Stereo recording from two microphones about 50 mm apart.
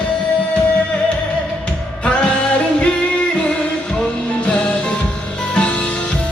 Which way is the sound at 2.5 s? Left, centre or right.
Left.